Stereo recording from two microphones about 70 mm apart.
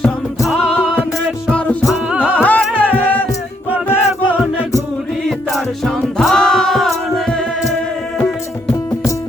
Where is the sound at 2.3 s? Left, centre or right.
Left.